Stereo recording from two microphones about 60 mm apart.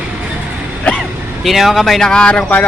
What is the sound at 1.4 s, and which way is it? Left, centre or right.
Speech, centre.